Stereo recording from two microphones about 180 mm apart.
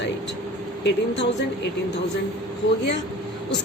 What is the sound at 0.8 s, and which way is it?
Speech, 75° left (ahead or behind).